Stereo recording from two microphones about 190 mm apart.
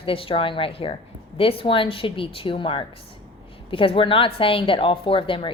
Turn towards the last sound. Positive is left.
turn(degrees=25)  # may be behind; listen again after turning